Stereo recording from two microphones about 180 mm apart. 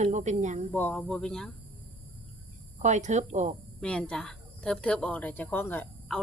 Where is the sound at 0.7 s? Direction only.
10° left (ahead or behind).